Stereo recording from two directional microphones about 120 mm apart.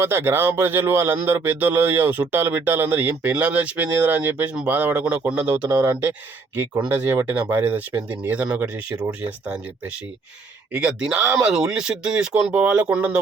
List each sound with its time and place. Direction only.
0.0 s speech: 20° right (ahead or behind)
5.5 s speech: 35° right (ahead or behind)
6.6 s speech: 15° right (ahead or behind)
8.7 s speech: 25° right (ahead or behind)
10.7 s speech: 10° right (ahead or behind)